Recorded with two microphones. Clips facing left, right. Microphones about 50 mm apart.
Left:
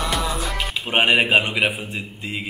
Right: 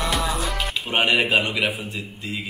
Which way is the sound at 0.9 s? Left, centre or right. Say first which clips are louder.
Left 3 dB; left.